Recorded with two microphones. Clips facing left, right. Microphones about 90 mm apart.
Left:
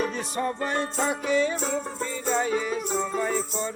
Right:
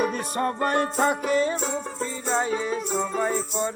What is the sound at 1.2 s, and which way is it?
Music, 45° right (ahead or behind).